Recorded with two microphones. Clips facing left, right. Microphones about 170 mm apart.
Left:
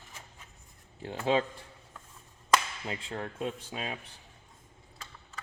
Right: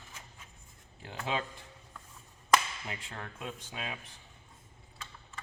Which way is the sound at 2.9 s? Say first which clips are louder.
Left 6 dB; 25° left (ahead or behind).